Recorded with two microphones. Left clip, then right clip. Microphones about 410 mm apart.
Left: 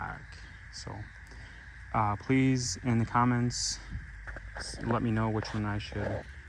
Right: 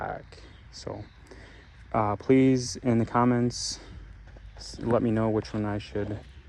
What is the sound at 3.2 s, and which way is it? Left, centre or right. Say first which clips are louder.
Speech: right 4 dB; right.